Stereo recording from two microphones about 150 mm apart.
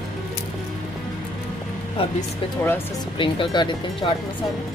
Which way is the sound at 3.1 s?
35° left (ahead or behind).